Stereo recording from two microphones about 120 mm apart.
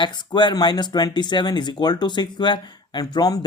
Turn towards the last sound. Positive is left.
turn(degrees=35)  # may be behind; listen again after turning